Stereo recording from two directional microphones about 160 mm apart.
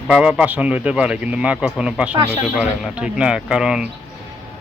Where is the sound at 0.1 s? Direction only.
5° right (ahead or behind).